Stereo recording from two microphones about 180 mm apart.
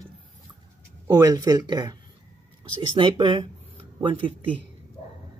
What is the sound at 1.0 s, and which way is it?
Speech, 15° right (ahead or behind).